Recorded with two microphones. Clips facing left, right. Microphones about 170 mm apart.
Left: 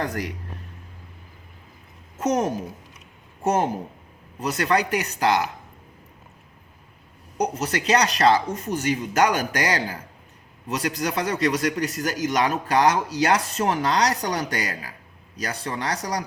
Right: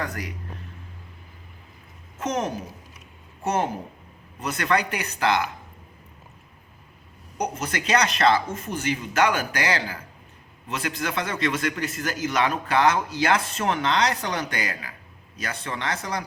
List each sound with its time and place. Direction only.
3.4 s speech: 45° left (ahead or behind)
4.4 s a man's voice: 35° left (ahead or behind)
7.3 s a man's voice: 35° left (ahead or behind)